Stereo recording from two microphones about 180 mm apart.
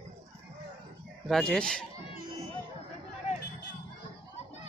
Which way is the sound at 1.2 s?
5° left (ahead or behind).